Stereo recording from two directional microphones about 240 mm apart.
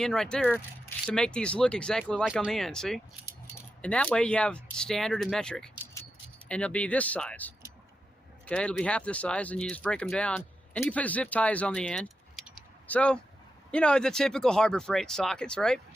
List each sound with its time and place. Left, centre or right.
0.0 s speech: centre